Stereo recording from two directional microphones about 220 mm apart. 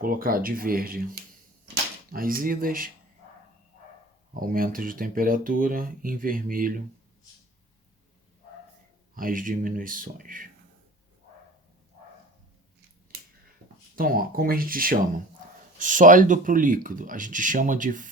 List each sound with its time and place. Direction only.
0.0 s speech: 40° right (ahead or behind)
4.4 s speech: 40° right (ahead or behind)
9.1 s speech: 40° right (ahead or behind)
13.9 s speech: 40° right (ahead or behind)